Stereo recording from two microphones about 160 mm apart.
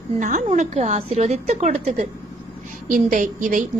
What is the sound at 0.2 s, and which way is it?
A woman's voice, 50° right (ahead or behind).